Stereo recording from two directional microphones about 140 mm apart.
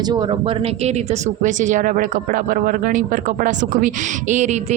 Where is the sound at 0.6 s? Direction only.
50° right (ahead or behind).